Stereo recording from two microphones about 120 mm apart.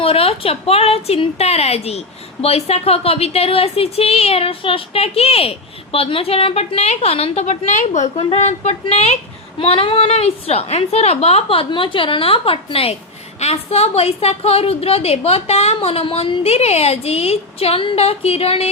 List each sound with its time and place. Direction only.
0.0 s a woman's voice: 55° left (ahead or behind); by 8.1 s 85° left
8.4 s a woman's voice: 70° left (ahead or behind)
9.6 s a woman's voice: 50° left (ahead or behind)